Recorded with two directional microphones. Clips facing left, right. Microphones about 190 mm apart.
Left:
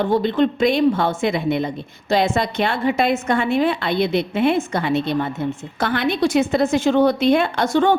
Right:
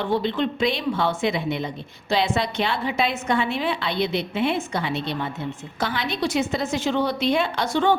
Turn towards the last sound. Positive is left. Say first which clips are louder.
# left 4 dB
turn(degrees=50)  # may be behind; listen again after turning